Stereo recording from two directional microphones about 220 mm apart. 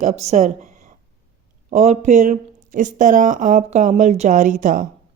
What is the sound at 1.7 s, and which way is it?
Speech, 30° right (ahead or behind).